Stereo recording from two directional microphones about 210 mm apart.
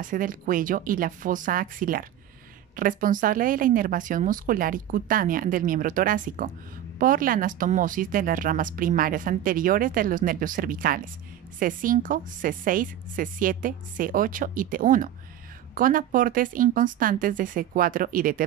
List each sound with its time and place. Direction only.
0.0 s speech: 40° right (ahead or behind)